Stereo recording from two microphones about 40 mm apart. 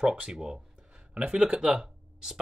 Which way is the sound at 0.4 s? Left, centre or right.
Right.